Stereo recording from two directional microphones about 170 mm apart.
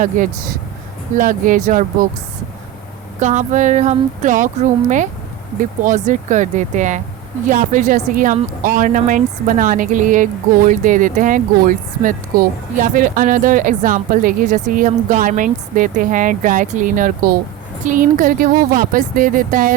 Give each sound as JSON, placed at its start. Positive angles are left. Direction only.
{"t": 0.2, "sound": "speech", "side_deg": -50}
{"t": 3.2, "sound": "speech", "side_deg": -45}
{"t": 5.5, "sound": "speech", "side_deg": -50}